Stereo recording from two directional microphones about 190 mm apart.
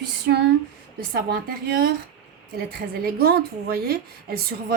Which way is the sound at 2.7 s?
55° right (ahead or behind).